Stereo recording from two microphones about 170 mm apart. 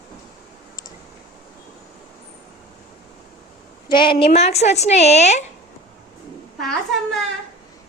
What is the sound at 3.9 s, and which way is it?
A woman's voice, 30° left (ahead or behind).